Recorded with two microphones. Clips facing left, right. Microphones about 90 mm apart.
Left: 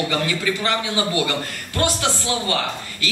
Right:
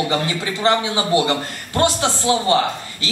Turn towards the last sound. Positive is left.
turn(degrees=-25)  # may be behind; listen again after turning